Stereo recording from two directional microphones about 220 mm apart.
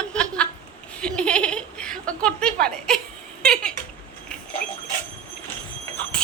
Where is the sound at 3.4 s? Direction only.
5° left (ahead or behind).